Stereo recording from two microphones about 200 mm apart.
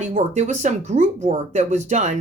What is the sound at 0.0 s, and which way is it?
Speech, 35° right (ahead or behind).